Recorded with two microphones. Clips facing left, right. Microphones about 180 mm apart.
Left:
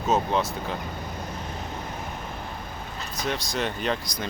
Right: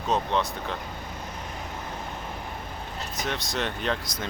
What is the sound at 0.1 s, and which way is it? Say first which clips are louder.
Speech: left 2 dB; 5° left (ahead or behind).